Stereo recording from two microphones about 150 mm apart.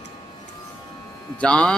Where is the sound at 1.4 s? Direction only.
5° left (ahead or behind).